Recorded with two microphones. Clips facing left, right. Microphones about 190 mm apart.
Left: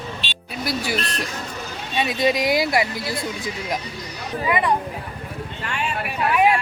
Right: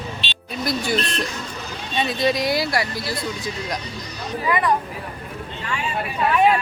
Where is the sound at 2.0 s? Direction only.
15° left (ahead or behind).